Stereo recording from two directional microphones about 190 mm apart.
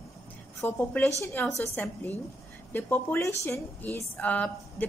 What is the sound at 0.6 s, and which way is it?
A woman's voice, 10° left (ahead or behind).